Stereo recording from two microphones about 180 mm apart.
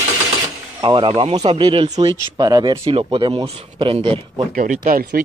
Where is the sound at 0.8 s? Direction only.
25° right (ahead or behind).